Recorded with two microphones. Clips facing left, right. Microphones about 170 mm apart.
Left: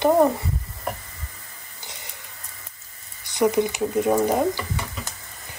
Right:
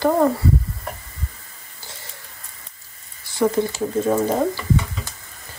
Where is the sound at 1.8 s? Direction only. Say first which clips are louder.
Right 1 dB; 20° left (ahead or behind).